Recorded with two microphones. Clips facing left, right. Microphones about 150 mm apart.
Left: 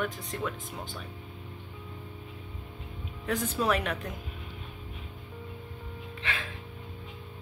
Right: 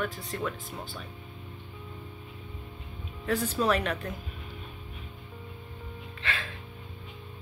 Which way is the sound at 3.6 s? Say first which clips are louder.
Right 1 dB; 10° left (ahead or behind).